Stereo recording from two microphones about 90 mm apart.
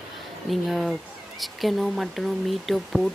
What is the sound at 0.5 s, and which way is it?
Speech, centre (ahead or behind).